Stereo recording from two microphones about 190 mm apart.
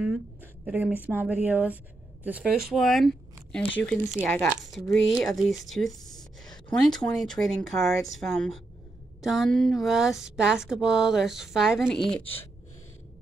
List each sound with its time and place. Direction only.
0.0 s a woman's voice: 5° right (ahead or behind)